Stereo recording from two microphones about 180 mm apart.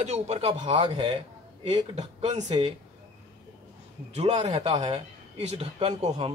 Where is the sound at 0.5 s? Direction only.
25° right (ahead or behind).